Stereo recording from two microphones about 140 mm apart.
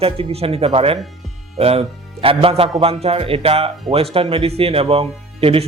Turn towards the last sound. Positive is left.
turn(degrees=-45)  # may be behind; listen again after turning